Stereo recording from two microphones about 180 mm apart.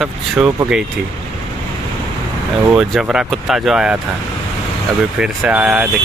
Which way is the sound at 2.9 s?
Centre (ahead or behind).